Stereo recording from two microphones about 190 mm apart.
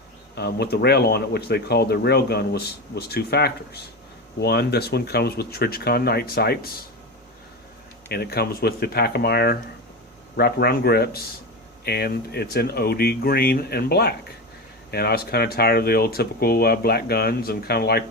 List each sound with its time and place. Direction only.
0.3 s speech: 60° left (ahead or behind)
8.1 s speech: 55° left (ahead or behind)